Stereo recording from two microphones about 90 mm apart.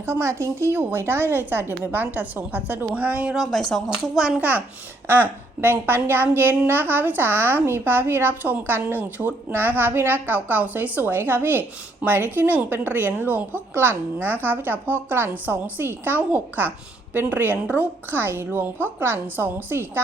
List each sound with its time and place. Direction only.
0.0 s speech: 30° right (ahead or behind); by 3.3 s 15° right (ahead or behind)
3.3 s speech: centre (ahead or behind); by 20.0 s 25° right (ahead or behind)